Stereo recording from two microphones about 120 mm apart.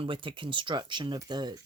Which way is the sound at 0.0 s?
45° right (ahead or behind).